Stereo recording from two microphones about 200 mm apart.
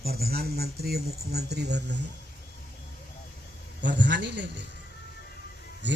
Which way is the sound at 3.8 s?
60° right (ahead or behind).